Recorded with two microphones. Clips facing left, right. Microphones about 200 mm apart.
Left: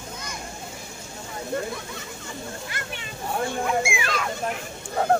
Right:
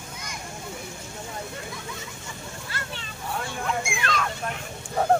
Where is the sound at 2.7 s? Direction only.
15° left (ahead or behind).